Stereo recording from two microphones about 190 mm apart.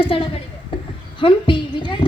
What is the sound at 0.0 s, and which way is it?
Speech, 30° left (ahead or behind).